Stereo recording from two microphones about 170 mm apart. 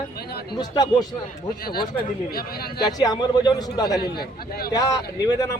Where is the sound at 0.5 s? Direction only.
25° left (ahead or behind).